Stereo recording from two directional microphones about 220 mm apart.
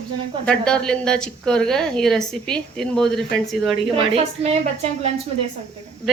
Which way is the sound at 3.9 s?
25° right (ahead or behind).